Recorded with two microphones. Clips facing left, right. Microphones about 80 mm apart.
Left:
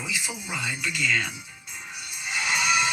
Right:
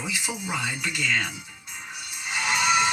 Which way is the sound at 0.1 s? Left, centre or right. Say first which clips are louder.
Right 2 dB; right.